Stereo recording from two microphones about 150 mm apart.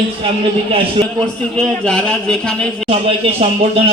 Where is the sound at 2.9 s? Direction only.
40° right (ahead or behind).